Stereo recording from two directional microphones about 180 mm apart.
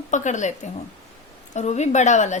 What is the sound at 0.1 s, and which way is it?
A woman's voice, 45° left (ahead or behind).